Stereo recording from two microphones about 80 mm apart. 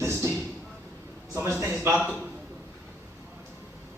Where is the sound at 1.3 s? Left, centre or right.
Right.